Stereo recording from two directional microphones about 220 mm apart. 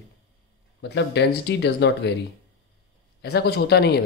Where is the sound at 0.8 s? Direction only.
50° left (ahead or behind).